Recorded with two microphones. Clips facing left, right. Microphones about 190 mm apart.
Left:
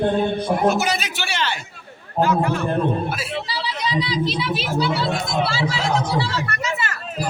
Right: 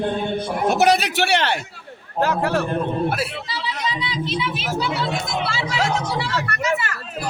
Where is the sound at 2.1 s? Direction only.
75° right (ahead or behind).